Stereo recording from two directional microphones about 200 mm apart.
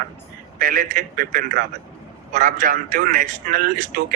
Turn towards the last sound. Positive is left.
turn(degrees=-45)  # may be behind; listen again after turning